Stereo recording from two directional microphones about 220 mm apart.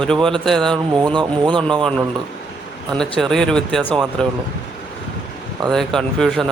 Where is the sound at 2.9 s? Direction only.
5° left (ahead or behind).